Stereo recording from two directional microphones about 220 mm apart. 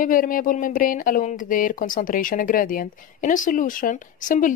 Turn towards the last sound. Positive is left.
turn(degrees=35)  # may be behind; listen again after turning